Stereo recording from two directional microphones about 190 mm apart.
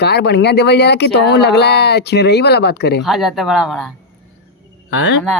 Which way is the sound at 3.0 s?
Centre (ahead or behind).